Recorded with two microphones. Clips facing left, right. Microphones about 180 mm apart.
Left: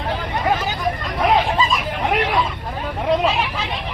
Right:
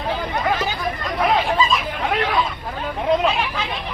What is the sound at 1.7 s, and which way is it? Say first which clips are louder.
Hubbub: left 1 dB; 15° left (ahead or behind).